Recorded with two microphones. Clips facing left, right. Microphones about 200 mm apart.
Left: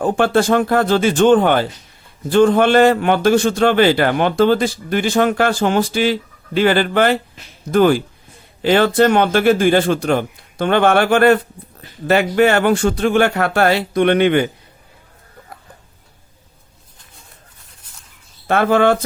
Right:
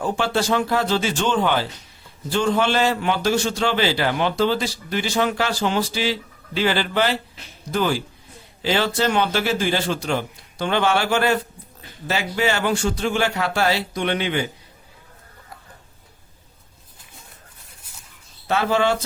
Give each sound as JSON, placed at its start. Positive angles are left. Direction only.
{"t": 0.0, "sound": "a man's voice", "side_deg": 55}
{"t": 18.4, "sound": "a man's voice", "side_deg": 55}